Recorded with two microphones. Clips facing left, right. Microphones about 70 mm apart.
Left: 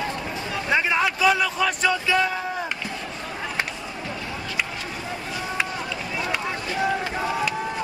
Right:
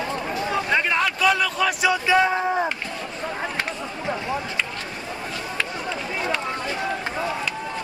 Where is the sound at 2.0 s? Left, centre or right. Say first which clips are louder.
Right 4 dB; right.